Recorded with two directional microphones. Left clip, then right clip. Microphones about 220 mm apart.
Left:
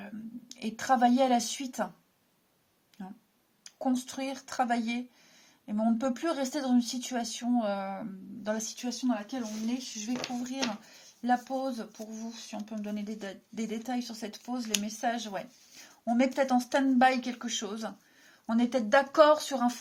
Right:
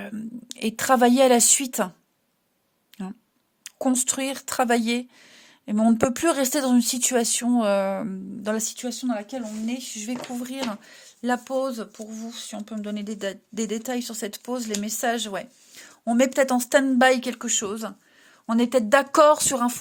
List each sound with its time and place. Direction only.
0.0 s a woman's voice: 50° right (ahead or behind)
3.6 s speech: 50° right (ahead or behind)